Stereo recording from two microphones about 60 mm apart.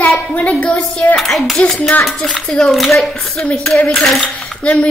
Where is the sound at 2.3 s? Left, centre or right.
Centre.